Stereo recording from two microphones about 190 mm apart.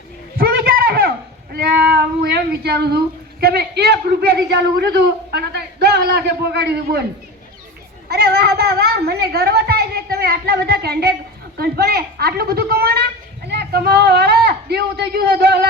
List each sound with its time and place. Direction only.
0.3 s a sound: 55° right (ahead or behind)
3.4 s a man's voice: 55° right (ahead or behind)
8.0 s a woman's voice: 55° right (ahead or behind)